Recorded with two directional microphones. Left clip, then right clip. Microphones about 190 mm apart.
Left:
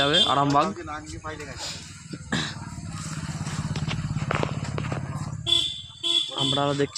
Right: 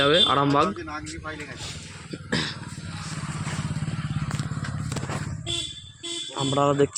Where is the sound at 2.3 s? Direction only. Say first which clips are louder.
Right 1 dB; 10° left (ahead or behind).